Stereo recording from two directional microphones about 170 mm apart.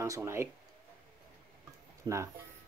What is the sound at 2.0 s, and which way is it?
Speech, 15° right (ahead or behind).